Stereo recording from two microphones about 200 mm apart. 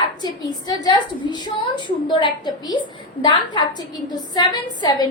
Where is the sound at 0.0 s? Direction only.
20° left (ahead or behind).